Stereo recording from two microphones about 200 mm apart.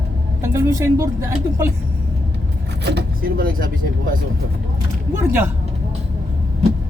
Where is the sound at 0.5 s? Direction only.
15° right (ahead or behind).